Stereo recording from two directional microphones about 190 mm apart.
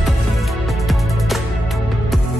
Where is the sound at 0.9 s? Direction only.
Centre (ahead or behind).